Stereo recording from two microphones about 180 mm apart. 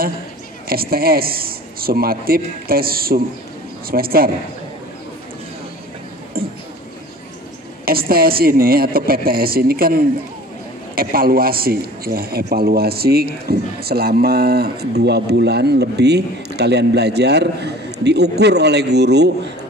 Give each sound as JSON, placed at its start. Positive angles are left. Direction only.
{"t": 0.7, "sound": "a man's voice", "side_deg": -55}
{"t": 6.4, "sound": "a sound", "side_deg": -55}
{"t": 7.8, "sound": "a man's voice", "side_deg": -55}